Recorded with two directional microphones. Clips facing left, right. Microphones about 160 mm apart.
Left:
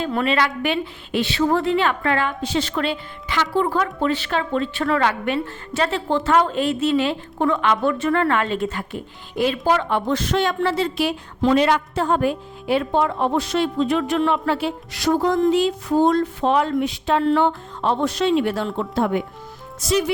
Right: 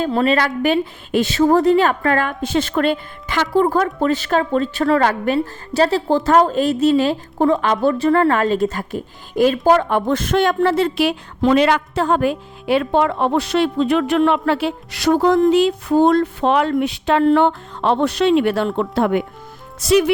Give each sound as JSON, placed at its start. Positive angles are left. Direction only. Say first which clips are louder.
{"t": 0.0, "sound": "a woman's voice", "louder": "right 4 dB", "side_deg": -35}